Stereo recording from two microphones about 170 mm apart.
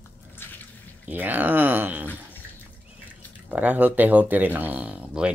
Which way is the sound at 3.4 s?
10° right (ahead or behind).